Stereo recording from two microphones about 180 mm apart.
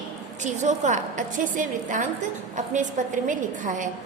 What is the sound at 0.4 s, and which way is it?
A woman's voice, 40° right (ahead or behind).